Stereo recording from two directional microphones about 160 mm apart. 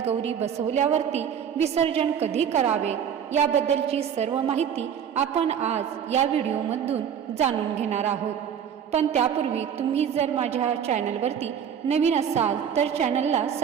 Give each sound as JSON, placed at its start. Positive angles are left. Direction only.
{"t": 0.0, "sound": "a woman's voice", "side_deg": -40}